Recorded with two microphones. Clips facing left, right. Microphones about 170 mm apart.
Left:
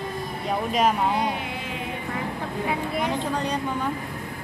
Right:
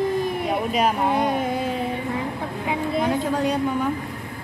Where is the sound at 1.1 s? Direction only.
45° right (ahead or behind).